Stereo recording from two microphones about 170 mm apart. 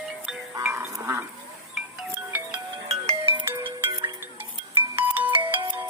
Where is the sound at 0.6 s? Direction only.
15° right (ahead or behind).